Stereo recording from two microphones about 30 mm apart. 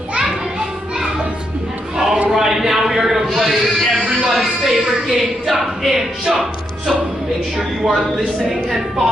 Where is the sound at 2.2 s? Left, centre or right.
Centre.